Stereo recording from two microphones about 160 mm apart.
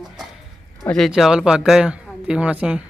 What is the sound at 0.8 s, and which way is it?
Speech, centre (ahead or behind).